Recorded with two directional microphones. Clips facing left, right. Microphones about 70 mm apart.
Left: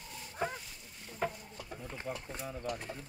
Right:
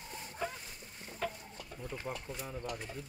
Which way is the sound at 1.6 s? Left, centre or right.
Left.